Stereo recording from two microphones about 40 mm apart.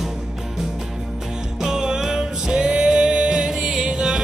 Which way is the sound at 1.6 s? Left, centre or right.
Centre.